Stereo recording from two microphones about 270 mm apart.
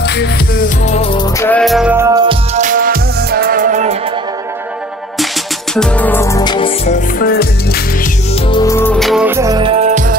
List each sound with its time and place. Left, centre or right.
0.8 s music: left
1.4 s music: centre
2.5 s music: right
5.8 s music: centre
6.9 s music: left
8.5 s music: centre; by 10.1 s right